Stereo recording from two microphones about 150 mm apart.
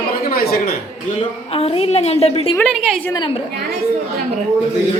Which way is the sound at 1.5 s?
40° left (ahead or behind).